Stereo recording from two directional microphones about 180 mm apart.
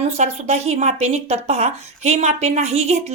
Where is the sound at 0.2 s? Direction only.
35° right (ahead or behind).